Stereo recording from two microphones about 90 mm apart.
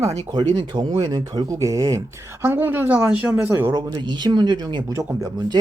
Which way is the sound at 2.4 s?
25° right (ahead or behind).